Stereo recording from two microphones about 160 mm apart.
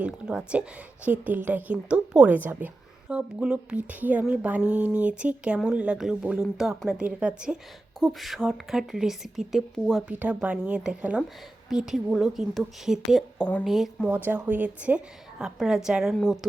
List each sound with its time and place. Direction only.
0.0 s a woman's voice: 5° right (ahead or behind)